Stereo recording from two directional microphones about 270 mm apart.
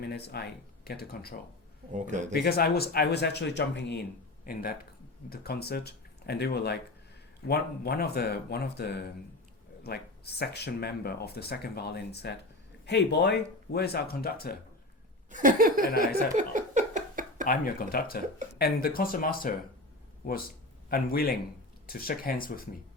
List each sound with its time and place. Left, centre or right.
0.1 s speech: left
1.9 s speech: right
2.3 s speech: left
5.3 s speech: left
15.3 s laughter: right
16.0 s a sound: right
17.4 s speech: left
20.9 s speech: left